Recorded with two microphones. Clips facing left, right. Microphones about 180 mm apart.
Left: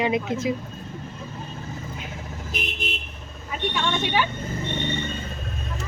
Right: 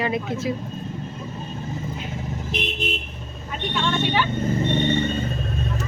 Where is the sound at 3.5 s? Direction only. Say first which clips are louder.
Right 1 dB; 10° left (ahead or behind).